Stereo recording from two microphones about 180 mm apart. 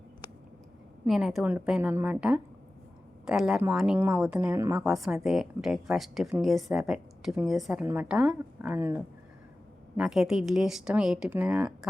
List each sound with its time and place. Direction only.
1.0 s a woman's voice: centre (ahead or behind)
4.5 s speech: 15° right (ahead or behind)
4.8 s a woman's voice: centre (ahead or behind)
10.0 s a woman's voice: 5° right (ahead or behind)